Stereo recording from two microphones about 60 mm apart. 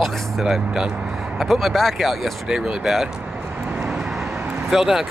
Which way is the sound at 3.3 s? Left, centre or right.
Right.